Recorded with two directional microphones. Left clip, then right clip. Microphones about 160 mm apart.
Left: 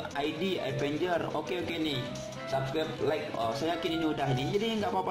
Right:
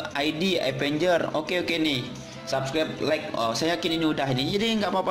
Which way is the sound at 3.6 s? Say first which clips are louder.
Right 6 dB; 20° right (ahead or behind).